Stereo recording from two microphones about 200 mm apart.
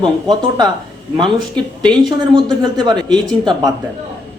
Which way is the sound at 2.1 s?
20° right (ahead or behind).